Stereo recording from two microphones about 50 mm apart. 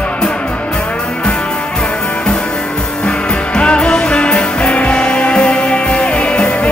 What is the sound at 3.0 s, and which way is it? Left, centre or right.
Music, centre.